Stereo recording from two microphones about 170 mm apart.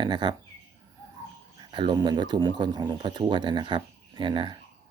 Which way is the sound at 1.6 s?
25° right (ahead or behind).